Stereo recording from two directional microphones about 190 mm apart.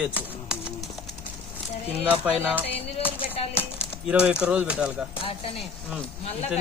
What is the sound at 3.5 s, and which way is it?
Speech, 5° right (ahead or behind).